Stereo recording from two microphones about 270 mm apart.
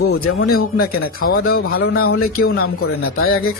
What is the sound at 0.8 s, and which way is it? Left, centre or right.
Speech, left.